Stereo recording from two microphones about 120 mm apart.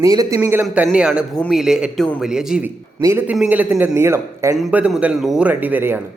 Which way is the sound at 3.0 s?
25° right (ahead or behind).